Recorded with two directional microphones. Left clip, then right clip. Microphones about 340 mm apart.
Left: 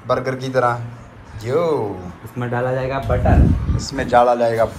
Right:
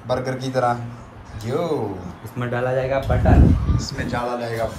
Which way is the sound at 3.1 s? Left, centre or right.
Centre.